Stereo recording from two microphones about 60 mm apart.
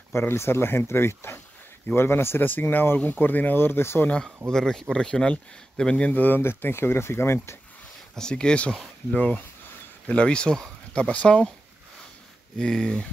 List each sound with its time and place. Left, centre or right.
0.3 s speech: left
4.5 s speech: centre
6.1 s speech: left
8.2 s speech: centre
12.5 s speech: centre